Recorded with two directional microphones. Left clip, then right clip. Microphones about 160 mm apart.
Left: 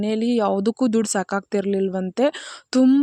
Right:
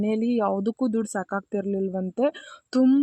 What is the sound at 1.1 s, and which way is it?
A woman's voice, 20° left (ahead or behind).